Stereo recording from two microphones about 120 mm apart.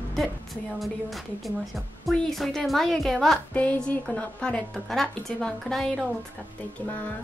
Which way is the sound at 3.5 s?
10° left (ahead or behind).